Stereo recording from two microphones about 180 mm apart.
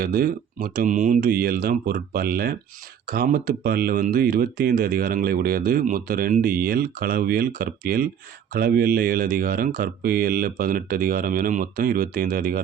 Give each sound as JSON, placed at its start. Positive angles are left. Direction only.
{"t": 0.0, "sound": "speech", "side_deg": -55}